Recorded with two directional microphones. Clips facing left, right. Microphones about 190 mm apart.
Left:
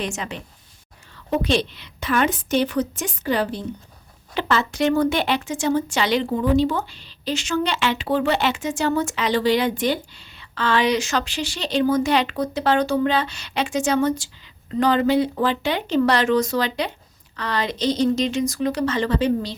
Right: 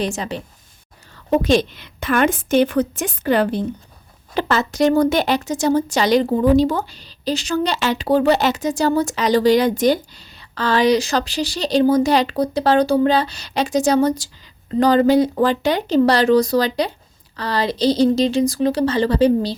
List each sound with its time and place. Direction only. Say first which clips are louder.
0.0 s a woman's voice: right 5 dB; 35° right (ahead or behind); by 3.6 s 55° right (ahead or behind)
4.4 s speech: right 4 dB; 40° right (ahead or behind)